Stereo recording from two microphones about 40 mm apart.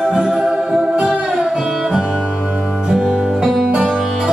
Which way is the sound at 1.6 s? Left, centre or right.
Centre.